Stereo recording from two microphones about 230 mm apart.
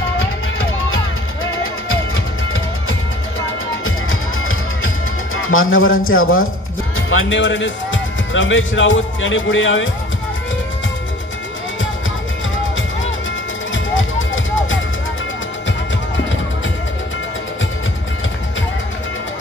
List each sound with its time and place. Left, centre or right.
1.9 s music: left
6.0 s a man's voice: left
13.9 s music: left